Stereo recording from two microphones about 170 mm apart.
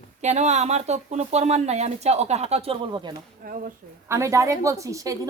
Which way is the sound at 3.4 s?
55° right (ahead or behind).